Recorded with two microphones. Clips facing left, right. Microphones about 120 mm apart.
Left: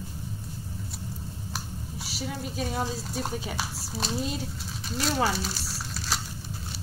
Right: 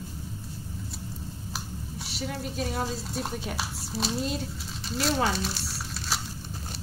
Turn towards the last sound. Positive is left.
turn(degrees=0)  # may be behind; listen again after turning